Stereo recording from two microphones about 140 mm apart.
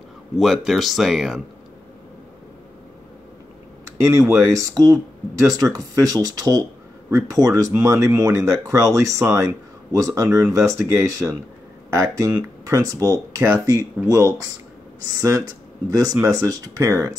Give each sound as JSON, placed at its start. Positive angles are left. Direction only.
{"t": 0.4, "sound": "speech", "side_deg": 0}
{"t": 4.0, "sound": "speech", "side_deg": -20}